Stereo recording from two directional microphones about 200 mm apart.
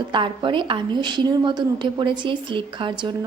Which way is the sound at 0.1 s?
25° right (ahead or behind).